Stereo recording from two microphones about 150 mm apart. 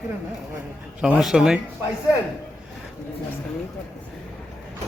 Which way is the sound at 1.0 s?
5° right (ahead or behind).